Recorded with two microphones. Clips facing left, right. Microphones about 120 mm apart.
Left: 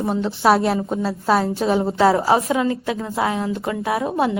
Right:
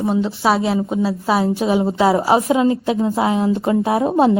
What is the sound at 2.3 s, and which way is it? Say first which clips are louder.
A woman's voice: right 4 dB; 20° right (ahead or behind).